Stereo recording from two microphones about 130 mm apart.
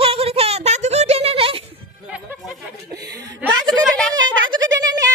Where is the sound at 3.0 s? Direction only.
30° right (ahead or behind).